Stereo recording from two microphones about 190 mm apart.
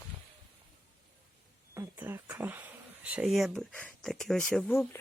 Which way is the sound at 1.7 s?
15° right (ahead or behind).